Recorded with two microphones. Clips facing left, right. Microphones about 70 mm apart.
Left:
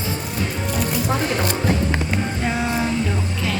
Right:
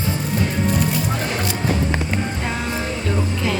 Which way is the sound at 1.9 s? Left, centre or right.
Centre.